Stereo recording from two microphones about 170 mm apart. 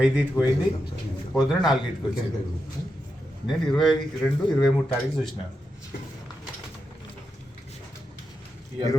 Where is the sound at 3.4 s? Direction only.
Centre (ahead or behind).